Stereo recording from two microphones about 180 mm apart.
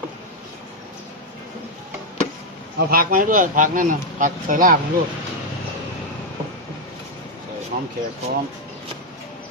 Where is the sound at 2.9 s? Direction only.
50° right (ahead or behind).